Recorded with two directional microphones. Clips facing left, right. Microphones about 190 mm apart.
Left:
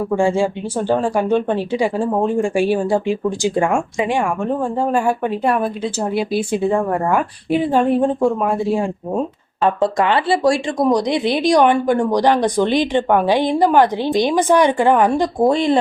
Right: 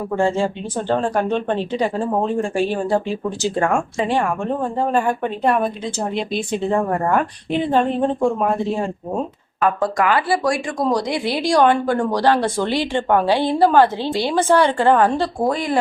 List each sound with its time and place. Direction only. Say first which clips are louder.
0.2 s speech: even; 10° left (ahead or behind)
9.6 s speech: left 2 dB; 25° left (ahead or behind)